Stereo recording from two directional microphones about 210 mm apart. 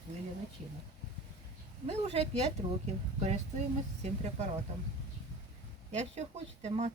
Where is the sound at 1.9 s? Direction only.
30° right (ahead or behind).